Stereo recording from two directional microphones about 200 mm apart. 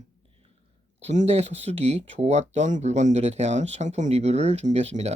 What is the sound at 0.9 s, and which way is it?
Speech, 35° right (ahead or behind).